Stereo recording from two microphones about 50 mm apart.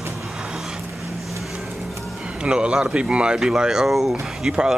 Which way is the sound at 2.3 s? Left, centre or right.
Centre.